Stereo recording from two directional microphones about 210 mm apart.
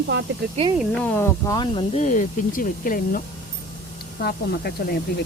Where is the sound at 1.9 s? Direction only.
35° left (ahead or behind).